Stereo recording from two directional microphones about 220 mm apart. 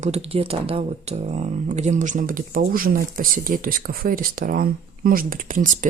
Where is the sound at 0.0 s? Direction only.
30° right (ahead or behind).